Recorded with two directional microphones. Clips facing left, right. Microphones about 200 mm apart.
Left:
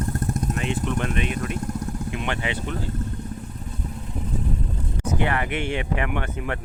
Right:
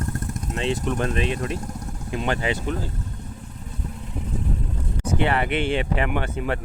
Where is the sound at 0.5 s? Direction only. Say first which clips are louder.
Right 6 dB; 30° right (ahead or behind).